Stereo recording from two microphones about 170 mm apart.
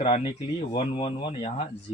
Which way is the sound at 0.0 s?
30° left (ahead or behind).